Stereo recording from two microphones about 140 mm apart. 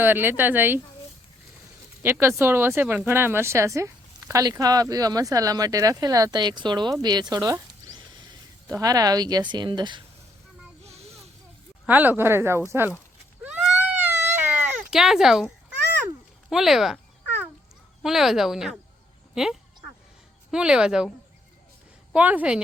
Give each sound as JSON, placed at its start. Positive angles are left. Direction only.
{"t": 0.0, "sound": "speech", "side_deg": -15}
{"t": 2.0, "sound": "speech", "side_deg": -15}
{"t": 8.8, "sound": "speech", "side_deg": -25}
{"t": 10.8, "sound": "a sound", "side_deg": -50}
{"t": 11.9, "sound": "speech", "side_deg": -10}
{"t": 13.4, "sound": "a sound", "side_deg": -10}
{"t": 14.9, "sound": "speech", "side_deg": -5}
{"t": 16.5, "sound": "speech", "side_deg": 0}
{"t": 18.0, "sound": "speech", "side_deg": 0}
{"t": 22.1, "sound": "speech", "side_deg": -10}